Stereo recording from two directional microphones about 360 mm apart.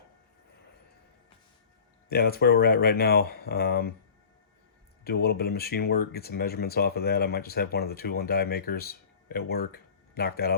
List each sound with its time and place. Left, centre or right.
2.0 s speech: left
5.0 s speech: left